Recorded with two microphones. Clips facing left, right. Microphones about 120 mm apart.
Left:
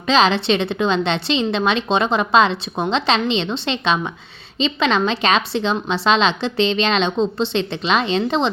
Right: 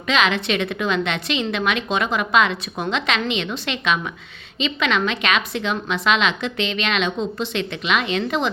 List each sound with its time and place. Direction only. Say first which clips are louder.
0.1 s a woman's voice: left 4 dB; 30° left (ahead or behind)